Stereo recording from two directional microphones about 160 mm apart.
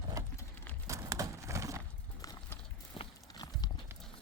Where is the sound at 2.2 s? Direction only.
20° left (ahead or behind).